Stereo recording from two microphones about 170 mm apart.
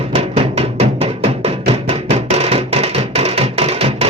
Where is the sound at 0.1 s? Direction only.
35° right (ahead or behind).